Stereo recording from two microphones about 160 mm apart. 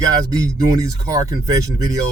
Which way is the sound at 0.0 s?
20° right (ahead or behind).